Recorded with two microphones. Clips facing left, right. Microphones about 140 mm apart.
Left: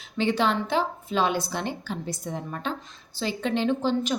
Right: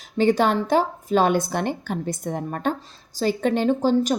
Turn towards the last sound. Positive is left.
turn(degrees=-40)  # may be behind; listen again after turning